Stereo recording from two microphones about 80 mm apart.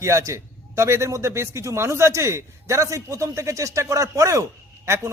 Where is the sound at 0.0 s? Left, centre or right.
Right.